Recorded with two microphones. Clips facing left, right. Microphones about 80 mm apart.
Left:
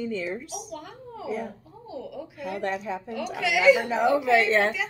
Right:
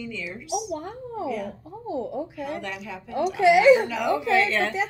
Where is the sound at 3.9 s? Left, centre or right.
Left.